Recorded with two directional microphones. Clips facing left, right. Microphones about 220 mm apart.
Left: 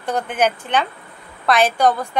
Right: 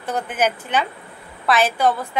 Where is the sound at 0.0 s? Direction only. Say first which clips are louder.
Left 2 dB; 5° right (ahead or behind).